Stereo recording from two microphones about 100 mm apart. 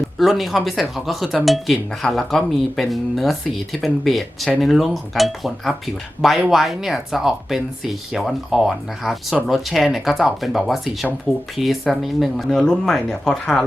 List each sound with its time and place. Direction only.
0.2 s speech: centre (ahead or behind)